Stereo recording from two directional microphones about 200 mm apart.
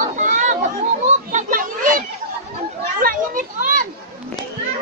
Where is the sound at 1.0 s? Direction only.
40° right (ahead or behind).